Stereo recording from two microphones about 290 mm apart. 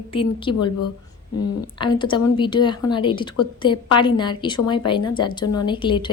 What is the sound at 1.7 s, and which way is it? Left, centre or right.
A woman's voice, centre.